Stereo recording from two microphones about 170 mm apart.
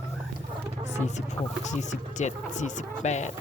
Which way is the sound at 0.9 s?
40° left (ahead or behind).